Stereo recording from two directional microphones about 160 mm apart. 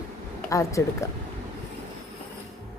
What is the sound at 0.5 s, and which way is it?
Speech, 20° left (ahead or behind).